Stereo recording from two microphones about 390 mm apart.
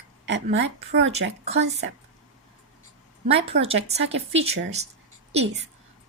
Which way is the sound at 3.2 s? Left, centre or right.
Centre.